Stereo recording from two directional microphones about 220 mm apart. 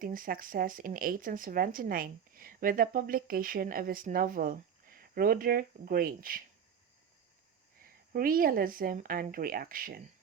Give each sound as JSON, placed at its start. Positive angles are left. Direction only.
{"t": 0.0, "sound": "speech", "side_deg": -40}
{"t": 8.1, "sound": "speech", "side_deg": -40}